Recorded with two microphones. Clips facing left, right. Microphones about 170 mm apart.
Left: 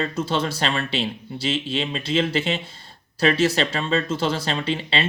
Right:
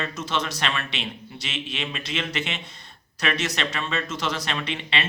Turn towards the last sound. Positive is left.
turn(degrees=30)  # may be behind; listen again after turning